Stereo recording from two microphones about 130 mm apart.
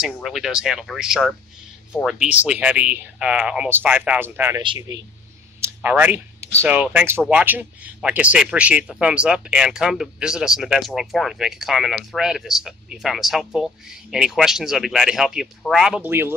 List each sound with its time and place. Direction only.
0.0 s speech: centre (ahead or behind)
5.6 s a sound: 15° right (ahead or behind)
6.6 s speech: 10° right (ahead or behind)
16.0 s speech: 20° right (ahead or behind)